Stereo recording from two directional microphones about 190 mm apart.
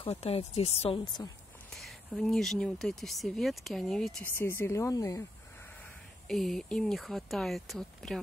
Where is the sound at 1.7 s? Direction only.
Centre (ahead or behind); by 5.2 s 15° left (ahead or behind).